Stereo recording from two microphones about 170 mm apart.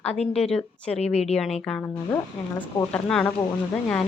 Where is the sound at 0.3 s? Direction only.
5° left (ahead or behind).